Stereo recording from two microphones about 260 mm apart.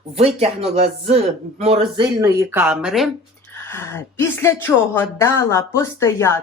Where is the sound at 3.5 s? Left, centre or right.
Centre.